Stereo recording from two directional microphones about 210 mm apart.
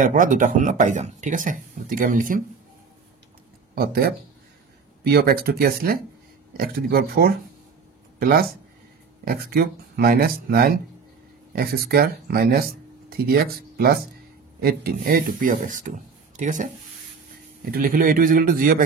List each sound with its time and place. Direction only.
0.0 s speech: 40° right (ahead or behind)
3.7 s speech: 45° right (ahead or behind)